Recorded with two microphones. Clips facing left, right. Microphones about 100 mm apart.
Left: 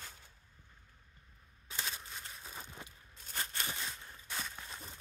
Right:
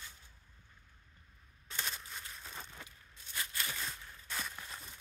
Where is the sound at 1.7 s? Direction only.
5° left (ahead or behind).